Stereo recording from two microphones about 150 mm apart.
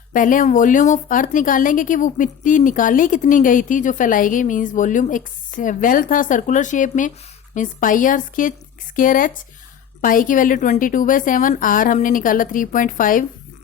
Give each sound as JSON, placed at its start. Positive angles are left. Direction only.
{"t": 0.1, "sound": "a woman's voice", "side_deg": 60}